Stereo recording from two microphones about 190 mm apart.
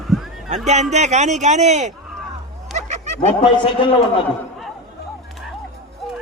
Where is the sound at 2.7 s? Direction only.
35° right (ahead or behind).